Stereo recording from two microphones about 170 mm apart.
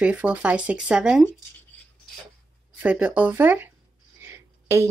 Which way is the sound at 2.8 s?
10° right (ahead or behind).